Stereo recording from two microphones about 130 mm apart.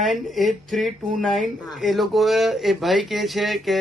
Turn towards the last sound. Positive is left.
turn(degrees=0)  # may be behind; listen again after turning